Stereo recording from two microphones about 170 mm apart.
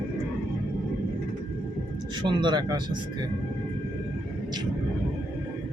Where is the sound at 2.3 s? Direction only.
25° right (ahead or behind).